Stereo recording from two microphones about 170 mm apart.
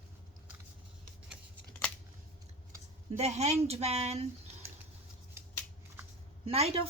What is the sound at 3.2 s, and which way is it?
Speech, 40° right (ahead or behind).